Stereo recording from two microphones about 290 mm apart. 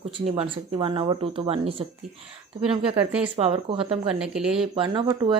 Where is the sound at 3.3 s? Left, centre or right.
Centre.